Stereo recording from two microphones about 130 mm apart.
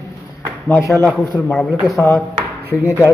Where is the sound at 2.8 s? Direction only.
15° right (ahead or behind).